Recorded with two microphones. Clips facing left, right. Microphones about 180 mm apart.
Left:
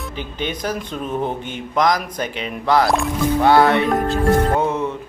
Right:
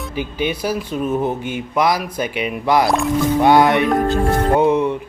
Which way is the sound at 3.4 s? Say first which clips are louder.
Right 1 dB; 15° right (ahead or behind).